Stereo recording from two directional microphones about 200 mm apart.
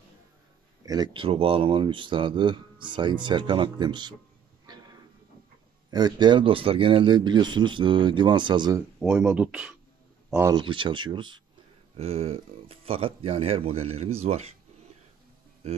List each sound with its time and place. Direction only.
0.8 s a man's voice: 20° right (ahead or behind)
4.7 s a sound: 20° right (ahead or behind)
5.9 s a man's voice: 20° right (ahead or behind)
10.3 s a man's voice: 15° right (ahead or behind)
15.6 s speech: 30° right (ahead or behind)